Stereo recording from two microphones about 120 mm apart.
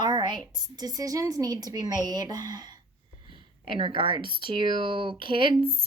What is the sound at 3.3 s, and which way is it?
Speech, 45° right (ahead or behind).